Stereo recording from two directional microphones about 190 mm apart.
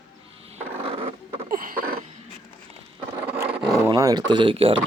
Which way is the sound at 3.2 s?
10° right (ahead or behind).